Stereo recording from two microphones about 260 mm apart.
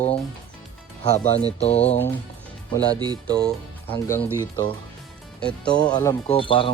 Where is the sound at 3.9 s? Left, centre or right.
Centre.